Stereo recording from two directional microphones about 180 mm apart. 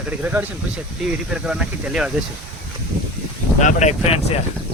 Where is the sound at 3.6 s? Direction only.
40° left (ahead or behind).